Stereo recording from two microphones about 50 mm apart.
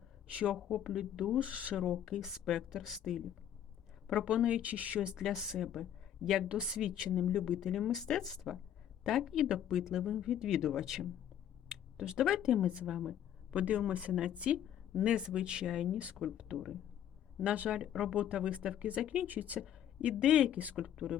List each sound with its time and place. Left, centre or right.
0.4 s speech: centre
1.4 s speech: right
2.0 s a woman's voice: centre
4.0 s speech: centre
5.2 s a woman's voice: centre
7.3 s a woman's voice: centre
9.3 s speech: centre
9.6 s a woman's voice: centre
12.6 s speech: right
16.2 s a woman's voice: centre
17.4 s speech: right
19.5 s speech: right
20.5 s speech: right